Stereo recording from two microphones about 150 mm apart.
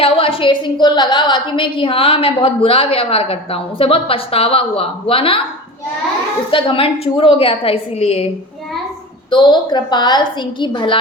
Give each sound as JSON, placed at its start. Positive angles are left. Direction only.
{"t": 0.0, "sound": "a woman's voice", "side_deg": 35}
{"t": 6.5, "sound": "a woman's voice", "side_deg": 35}
{"t": 9.3, "sound": "a woman's voice", "side_deg": 30}